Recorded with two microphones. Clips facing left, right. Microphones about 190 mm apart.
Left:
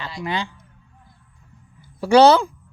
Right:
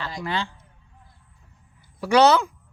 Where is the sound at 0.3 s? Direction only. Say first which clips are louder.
Left 2 dB; 15° left (ahead or behind).